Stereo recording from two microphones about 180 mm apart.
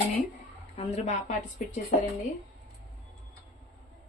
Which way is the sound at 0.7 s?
40° left (ahead or behind).